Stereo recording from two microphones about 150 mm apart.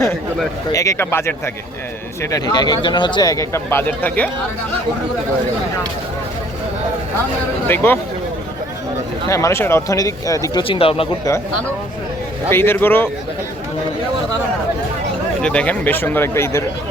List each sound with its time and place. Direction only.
0.7 s speech: 20° left (ahead or behind)
2.3 s speech: 25° left (ahead or behind); by 4.3 s 10° left (ahead or behind)
7.7 s speech: 15° left (ahead or behind)
9.3 s speech: 20° left (ahead or behind)
10.6 s speech: 40° left (ahead or behind)
12.5 s speech: 15° left (ahead or behind)
15.4 s speech: 5° left (ahead or behind)